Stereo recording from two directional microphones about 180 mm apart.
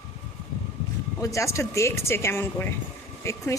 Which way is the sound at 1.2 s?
15° left (ahead or behind).